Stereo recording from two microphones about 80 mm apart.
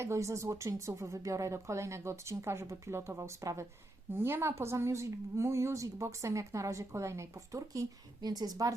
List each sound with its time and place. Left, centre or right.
0.0 s a woman's voice: right